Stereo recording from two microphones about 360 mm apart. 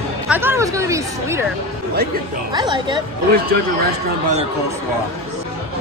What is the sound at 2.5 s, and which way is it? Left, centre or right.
Speech, centre.